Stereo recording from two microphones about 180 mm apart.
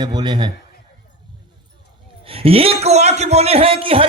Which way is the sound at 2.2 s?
30° right (ahead or behind).